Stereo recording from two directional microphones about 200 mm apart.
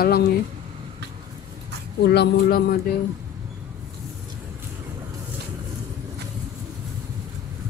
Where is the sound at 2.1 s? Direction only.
55° left (ahead or behind).